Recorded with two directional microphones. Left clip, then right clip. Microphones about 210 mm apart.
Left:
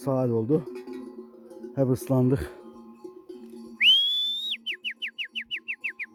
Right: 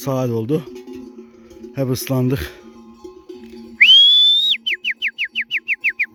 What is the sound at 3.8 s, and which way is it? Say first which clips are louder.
Whistle: right 12 dB; 10° left (ahead or behind).